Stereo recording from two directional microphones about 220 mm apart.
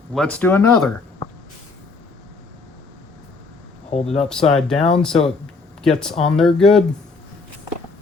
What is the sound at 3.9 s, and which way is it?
Speech, 30° left (ahead or behind).